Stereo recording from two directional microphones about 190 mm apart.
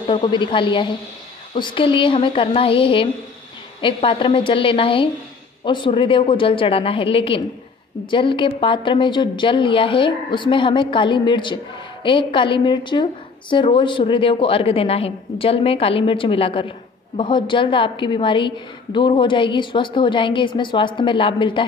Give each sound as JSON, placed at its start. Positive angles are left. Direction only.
{"t": 0.0, "sound": "a woman's voice", "side_deg": 25}